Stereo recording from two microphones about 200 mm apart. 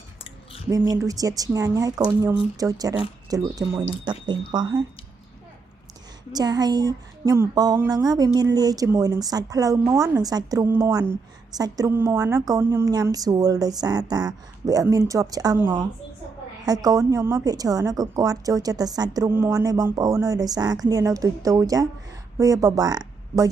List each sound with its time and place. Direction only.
0.7 s a woman's voice: 15° right (ahead or behind)
6.3 s a woman's voice: 20° right (ahead or behind)